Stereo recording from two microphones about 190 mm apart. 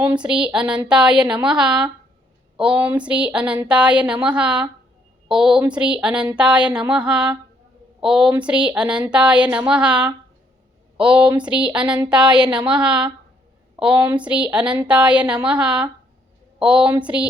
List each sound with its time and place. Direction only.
0.0 s speech: 5° right (ahead or behind)